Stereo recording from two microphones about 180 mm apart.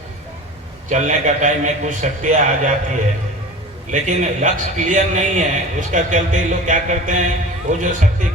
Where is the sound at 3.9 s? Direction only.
45° right (ahead or behind).